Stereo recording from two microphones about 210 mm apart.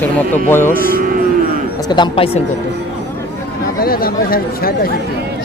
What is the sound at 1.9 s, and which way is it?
Speech, 25° left (ahead or behind).